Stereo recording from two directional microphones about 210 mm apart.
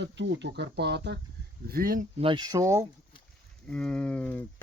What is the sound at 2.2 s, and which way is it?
Speech, 20° right (ahead or behind).